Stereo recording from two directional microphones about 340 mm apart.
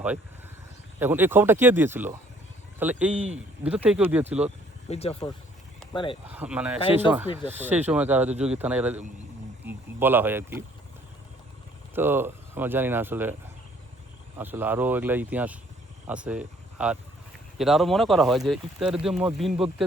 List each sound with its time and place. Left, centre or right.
0.9 s speech: centre
4.9 s speech: centre
6.3 s speech: centre
11.9 s speech: centre
14.3 s speech: centre